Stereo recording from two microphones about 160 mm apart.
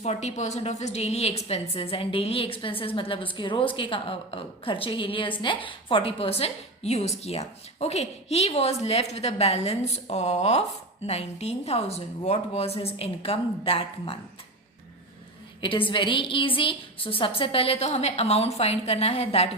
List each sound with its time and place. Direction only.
0.0 s a woman's voice: 45° left (ahead or behind)
15.9 s a woman's voice: 30° left (ahead or behind)